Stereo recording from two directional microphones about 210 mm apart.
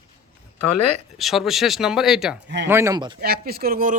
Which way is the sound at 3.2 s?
45° right (ahead or behind).